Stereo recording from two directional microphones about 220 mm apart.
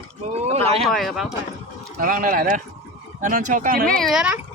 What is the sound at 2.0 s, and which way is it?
Speech, 40° right (ahead or behind).